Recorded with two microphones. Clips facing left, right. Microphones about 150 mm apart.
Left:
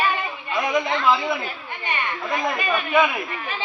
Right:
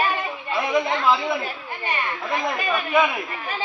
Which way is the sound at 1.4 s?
35° right (ahead or behind).